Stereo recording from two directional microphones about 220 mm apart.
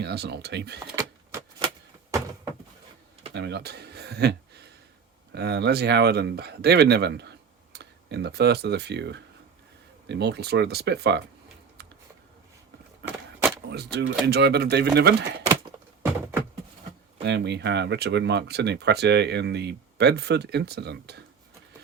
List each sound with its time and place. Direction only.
0.0 s speech: 50° right (ahead or behind)
0.9 s vehicle: 15° right (ahead or behind)
2.0 s a sound: 15° right (ahead or behind)
3.3 s speech: 50° right (ahead or behind)
13.0 s vehicle: 50° right (ahead or behind)
13.7 s speech: 50° right (ahead or behind)
17.2 s speech: 50° right (ahead or behind)